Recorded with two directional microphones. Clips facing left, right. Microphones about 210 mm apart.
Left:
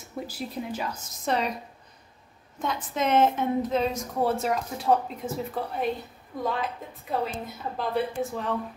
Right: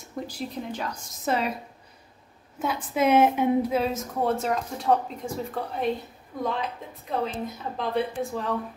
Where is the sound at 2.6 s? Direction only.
10° right (ahead or behind).